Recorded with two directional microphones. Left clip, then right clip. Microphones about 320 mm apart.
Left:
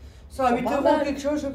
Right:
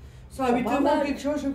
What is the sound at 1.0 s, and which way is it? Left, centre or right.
Speech, centre.